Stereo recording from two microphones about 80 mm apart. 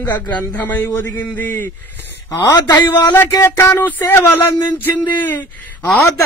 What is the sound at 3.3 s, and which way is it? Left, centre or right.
Speech, left.